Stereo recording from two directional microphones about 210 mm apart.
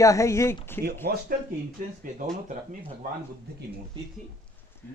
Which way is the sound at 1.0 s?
45° right (ahead or behind).